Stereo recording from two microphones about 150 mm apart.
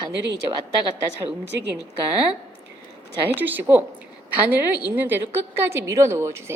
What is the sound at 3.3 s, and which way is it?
A woman's voice, 10° right (ahead or behind).